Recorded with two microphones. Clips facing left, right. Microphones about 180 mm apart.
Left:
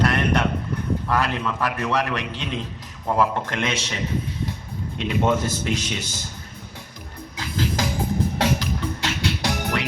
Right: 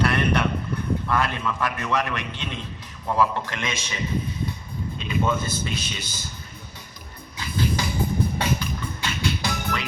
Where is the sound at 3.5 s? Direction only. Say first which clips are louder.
Left 5 dB; 60° left (ahead or behind).